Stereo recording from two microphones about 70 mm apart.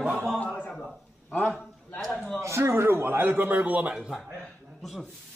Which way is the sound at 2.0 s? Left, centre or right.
Centre.